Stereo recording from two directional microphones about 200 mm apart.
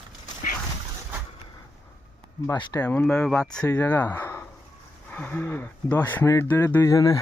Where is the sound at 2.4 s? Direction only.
20° left (ahead or behind).